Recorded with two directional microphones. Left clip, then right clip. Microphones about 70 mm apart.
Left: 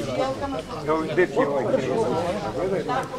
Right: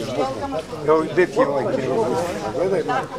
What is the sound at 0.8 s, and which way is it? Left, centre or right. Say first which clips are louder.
Speech: right 5 dB; right.